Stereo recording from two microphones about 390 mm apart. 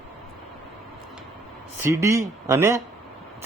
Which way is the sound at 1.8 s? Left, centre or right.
Centre.